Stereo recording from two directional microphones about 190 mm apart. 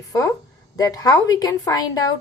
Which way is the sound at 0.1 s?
15° left (ahead or behind).